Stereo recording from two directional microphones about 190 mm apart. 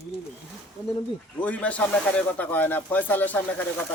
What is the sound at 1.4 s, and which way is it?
Speech, 5° left (ahead or behind).